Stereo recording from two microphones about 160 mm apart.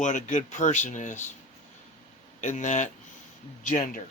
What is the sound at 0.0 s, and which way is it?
Speech, 50° left (ahead or behind).